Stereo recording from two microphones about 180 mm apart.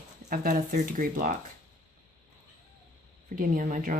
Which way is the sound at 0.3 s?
50° right (ahead or behind).